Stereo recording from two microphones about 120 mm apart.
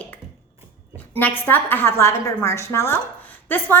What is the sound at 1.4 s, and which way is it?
A woman's voice, 15° left (ahead or behind).